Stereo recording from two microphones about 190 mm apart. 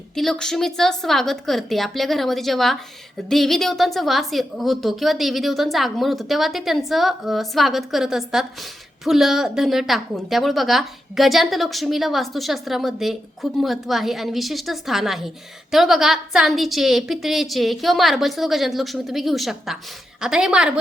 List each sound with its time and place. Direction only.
0.2 s a woman's voice: centre (ahead or behind)